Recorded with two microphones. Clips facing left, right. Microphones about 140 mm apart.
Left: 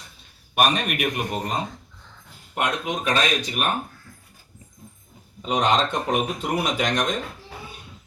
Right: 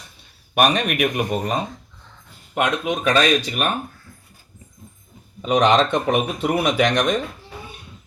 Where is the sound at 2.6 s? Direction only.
90° right.